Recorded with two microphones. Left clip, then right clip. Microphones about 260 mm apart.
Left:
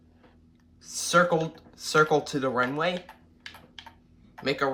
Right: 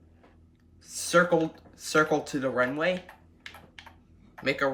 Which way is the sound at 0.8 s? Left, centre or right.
Centre.